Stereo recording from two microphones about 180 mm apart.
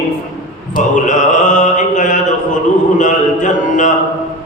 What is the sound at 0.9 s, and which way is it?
Mantra, 45° left (ahead or behind).